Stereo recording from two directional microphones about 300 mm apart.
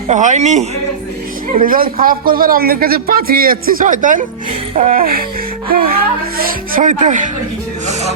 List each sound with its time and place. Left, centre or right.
0.1 s a man's voice: right